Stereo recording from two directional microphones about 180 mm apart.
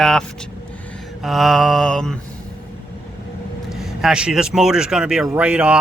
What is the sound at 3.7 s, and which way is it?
Speech, centre (ahead or behind).